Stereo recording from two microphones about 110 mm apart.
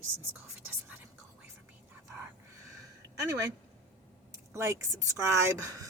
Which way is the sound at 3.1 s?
30° right (ahead or behind).